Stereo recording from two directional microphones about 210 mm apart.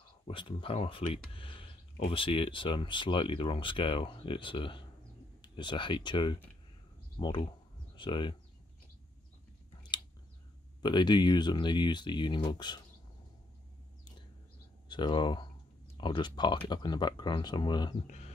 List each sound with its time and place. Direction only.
0.3 s speech: 25° left (ahead or behind)
10.8 s speech: 20° left (ahead or behind)
14.9 s speech: 20° left (ahead or behind)
18.0 s music: 35° left (ahead or behind)